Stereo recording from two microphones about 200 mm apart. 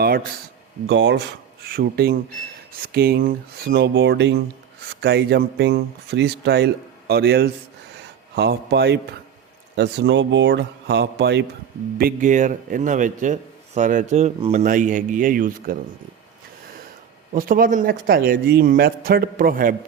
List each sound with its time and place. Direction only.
0.0 s a man's voice: 45° right (ahead or behind)
0.9 s speech: 60° right (ahead or behind)
1.6 s a man's voice: 50° right (ahead or behind)
11.9 s a man's voice: 45° right (ahead or behind)
17.3 s a man's voice: 45° right (ahead or behind)